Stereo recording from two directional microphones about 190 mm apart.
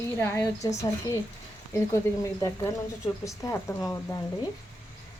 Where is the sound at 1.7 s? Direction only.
15° left (ahead or behind).